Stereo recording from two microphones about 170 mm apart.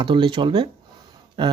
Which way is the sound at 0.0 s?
30° right (ahead or behind).